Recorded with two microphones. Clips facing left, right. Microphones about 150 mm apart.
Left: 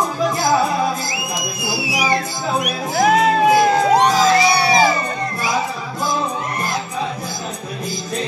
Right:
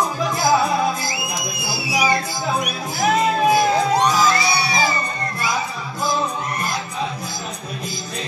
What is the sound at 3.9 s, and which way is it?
Music, 90° left.